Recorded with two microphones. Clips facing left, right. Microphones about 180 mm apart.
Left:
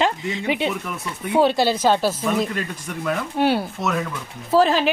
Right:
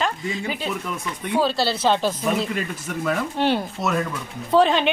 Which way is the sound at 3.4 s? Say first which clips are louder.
Left 3 dB; 10° left (ahead or behind).